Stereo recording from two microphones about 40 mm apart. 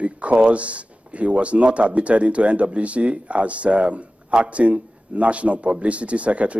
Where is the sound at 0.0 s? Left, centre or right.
Right.